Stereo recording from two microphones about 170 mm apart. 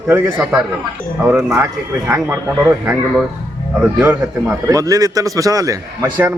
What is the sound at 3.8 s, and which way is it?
A man's voice, 10° right (ahead or behind).